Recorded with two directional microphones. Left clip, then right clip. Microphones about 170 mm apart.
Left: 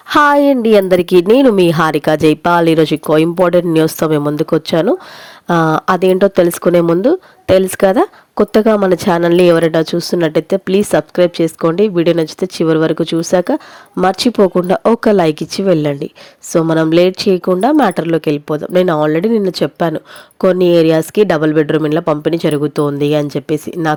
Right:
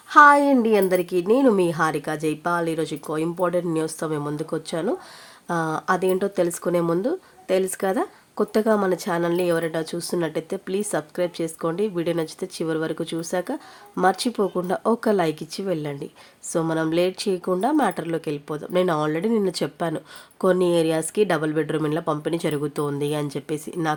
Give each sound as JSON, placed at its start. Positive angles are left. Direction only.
{"t": 0.1, "sound": "a woman's voice", "side_deg": 55}